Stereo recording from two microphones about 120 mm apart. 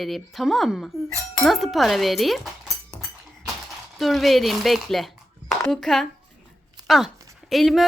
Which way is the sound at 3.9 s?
Centre (ahead or behind).